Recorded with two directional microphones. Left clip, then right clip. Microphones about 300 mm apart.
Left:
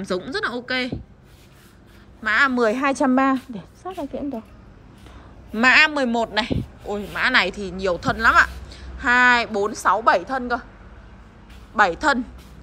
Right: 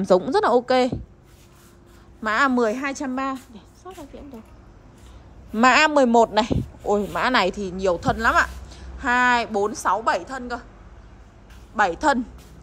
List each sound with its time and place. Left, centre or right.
0.0 s speech: centre
2.2 s speech: centre
2.7 s a woman's voice: centre
5.5 s speech: centre
11.7 s speech: centre